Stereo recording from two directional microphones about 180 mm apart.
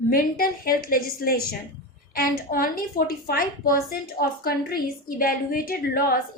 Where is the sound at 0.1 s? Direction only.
55° left (ahead or behind).